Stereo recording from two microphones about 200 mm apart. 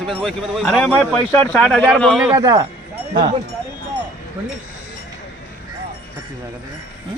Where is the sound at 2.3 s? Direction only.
15° right (ahead or behind).